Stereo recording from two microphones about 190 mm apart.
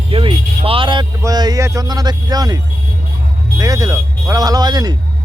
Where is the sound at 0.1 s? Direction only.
30° right (ahead or behind).